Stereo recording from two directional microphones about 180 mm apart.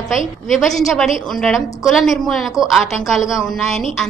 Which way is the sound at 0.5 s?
Centre (ahead or behind).